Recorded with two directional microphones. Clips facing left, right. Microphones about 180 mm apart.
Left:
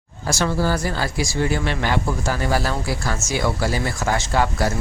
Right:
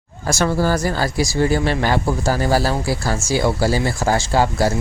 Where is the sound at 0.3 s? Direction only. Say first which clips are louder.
Right 3 dB; 45° right (ahead or behind).